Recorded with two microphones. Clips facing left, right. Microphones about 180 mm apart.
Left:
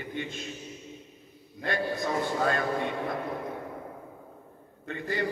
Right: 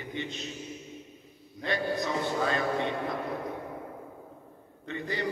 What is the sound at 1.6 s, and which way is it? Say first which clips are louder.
A man's voice: even; 50° left (ahead or behind).